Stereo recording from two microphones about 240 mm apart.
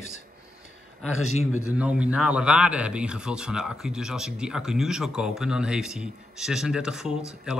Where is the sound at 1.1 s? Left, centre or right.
Left.